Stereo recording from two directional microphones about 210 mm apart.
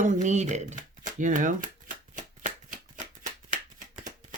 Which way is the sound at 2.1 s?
35° right (ahead or behind).